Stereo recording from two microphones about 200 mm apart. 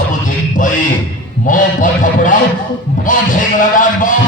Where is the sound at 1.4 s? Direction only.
40° left (ahead or behind).